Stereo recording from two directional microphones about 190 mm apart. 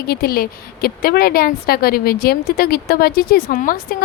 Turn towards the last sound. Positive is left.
turn(degrees=50)  # may be behind; listen again after turning